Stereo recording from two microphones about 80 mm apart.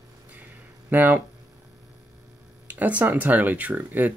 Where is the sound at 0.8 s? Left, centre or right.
Right.